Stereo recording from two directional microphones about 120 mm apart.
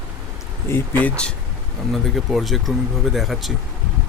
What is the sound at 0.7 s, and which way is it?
Speech, 20° left (ahead or behind).